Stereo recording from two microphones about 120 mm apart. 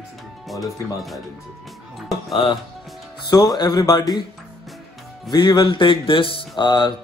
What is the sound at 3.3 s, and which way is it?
Music, 35° left (ahead or behind).